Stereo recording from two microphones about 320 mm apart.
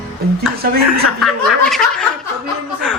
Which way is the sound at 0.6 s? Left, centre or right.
Right.